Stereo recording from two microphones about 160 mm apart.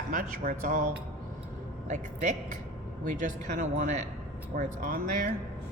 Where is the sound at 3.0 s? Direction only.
55° right (ahead or behind).